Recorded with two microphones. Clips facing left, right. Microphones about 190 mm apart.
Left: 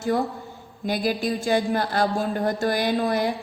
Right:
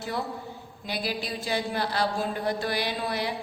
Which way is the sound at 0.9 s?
45° left (ahead or behind).